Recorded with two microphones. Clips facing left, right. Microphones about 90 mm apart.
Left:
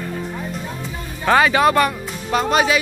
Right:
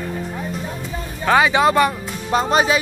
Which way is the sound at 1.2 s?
10° right (ahead or behind).